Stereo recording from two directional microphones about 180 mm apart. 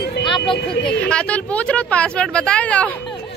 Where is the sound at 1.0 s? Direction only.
5° left (ahead or behind).